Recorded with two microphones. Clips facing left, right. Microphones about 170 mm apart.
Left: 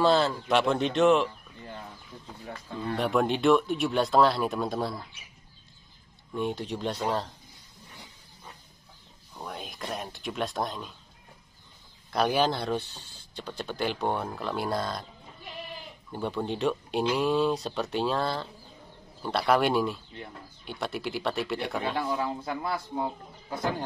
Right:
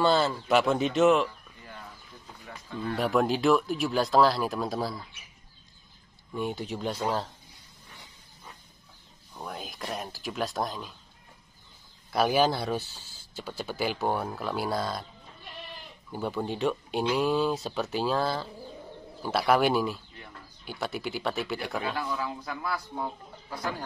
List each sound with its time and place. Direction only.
0.0 s speech: centre (ahead or behind)
3.0 s speech: centre (ahead or behind)
6.3 s speech: centre (ahead or behind)
9.3 s speech: centre (ahead or behind)
12.1 s speech: 5° right (ahead or behind)
16.1 s speech: 5° right (ahead or behind)
21.8 s speech: 25° left (ahead or behind)